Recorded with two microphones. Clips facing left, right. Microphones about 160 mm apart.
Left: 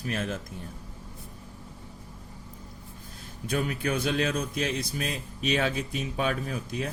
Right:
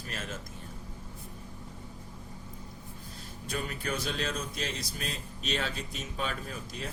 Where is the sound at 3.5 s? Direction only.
55° left (ahead or behind).